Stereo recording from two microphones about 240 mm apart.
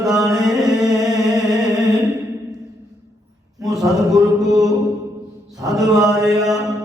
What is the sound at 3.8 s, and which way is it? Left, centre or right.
Mantra, centre.